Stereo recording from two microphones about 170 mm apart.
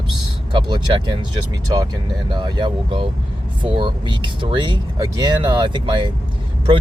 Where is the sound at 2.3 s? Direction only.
25° right (ahead or behind).